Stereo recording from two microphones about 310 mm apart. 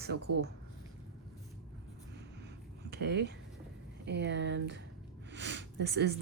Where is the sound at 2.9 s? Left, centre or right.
Right.